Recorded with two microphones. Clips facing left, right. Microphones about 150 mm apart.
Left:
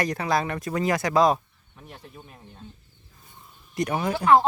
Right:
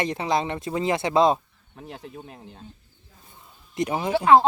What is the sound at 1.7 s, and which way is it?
Speech, 90° right.